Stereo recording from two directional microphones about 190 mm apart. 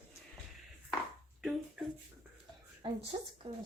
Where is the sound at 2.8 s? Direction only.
25° right (ahead or behind).